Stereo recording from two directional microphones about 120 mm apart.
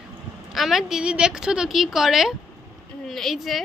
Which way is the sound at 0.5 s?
Centre (ahead or behind).